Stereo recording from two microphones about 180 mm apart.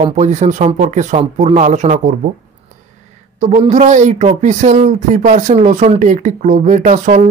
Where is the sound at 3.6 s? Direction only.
40° right (ahead or behind).